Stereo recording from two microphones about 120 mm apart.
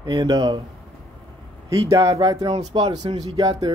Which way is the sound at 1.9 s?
35° right (ahead or behind).